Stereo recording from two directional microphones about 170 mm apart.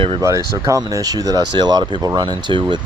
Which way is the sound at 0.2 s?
20° right (ahead or behind).